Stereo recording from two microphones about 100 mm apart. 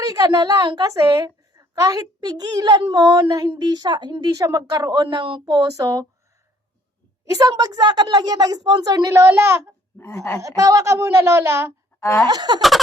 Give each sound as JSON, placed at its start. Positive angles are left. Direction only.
{"t": 0.0, "sound": "a woman's voice", "side_deg": -40}
{"t": 0.9, "sound": "a woman's voice", "side_deg": -35}
{"t": 4.9, "sound": "speech", "side_deg": -50}
{"t": 5.6, "sound": "a woman's voice", "side_deg": -35}
{"t": 7.3, "sound": "a woman's voice", "side_deg": -40}
{"t": 10.0, "sound": "speech", "side_deg": 30}
{"t": 10.4, "sound": "speech", "side_deg": -35}
{"t": 12.3, "sound": "speech", "side_deg": -45}